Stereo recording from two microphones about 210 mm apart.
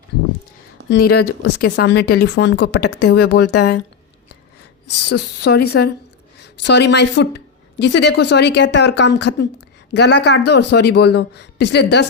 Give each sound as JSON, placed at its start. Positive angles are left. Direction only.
{"t": 0.9, "sound": "speech", "side_deg": 50}
{"t": 4.9, "sound": "speech", "side_deg": 55}